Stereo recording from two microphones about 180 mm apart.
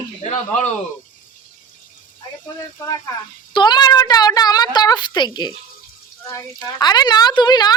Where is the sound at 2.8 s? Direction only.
15° left (ahead or behind).